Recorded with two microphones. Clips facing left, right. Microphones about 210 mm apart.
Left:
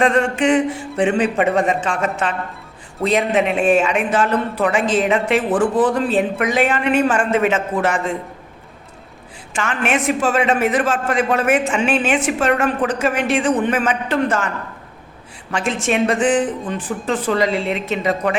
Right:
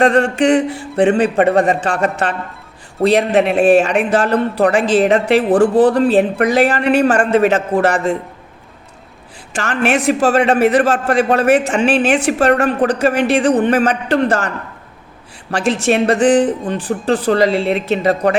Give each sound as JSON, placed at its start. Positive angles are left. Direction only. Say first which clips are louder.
{"t": 0.3, "sound": "speech", "louder": "right 3 dB", "side_deg": -35}
{"t": 3.0, "sound": "speech", "louder": "right 4 dB", "side_deg": -40}
{"t": 9.6, "sound": "speech", "louder": "right 4 dB", "side_deg": -35}